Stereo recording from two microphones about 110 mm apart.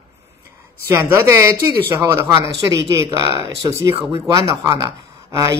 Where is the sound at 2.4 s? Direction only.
50° left (ahead or behind).